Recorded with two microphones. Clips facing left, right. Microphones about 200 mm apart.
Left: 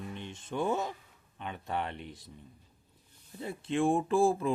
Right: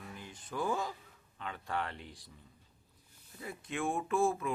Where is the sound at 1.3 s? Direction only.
20° left (ahead or behind).